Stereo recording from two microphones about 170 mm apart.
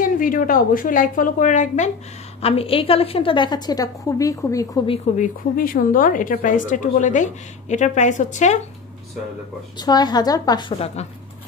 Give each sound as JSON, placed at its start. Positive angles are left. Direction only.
{"t": 0.0, "sound": "speech", "side_deg": 55}
{"t": 2.4, "sound": "a woman's voice", "side_deg": 35}
{"t": 4.8, "sound": "speech", "side_deg": 35}
{"t": 5.2, "sound": "speech", "side_deg": 55}
{"t": 9.8, "sound": "a woman's voice", "side_deg": 25}
{"t": 11.0, "sound": "speech", "side_deg": 40}